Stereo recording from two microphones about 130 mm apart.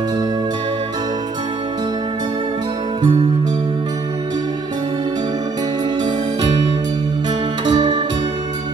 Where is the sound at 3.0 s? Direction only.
40° right (ahead or behind).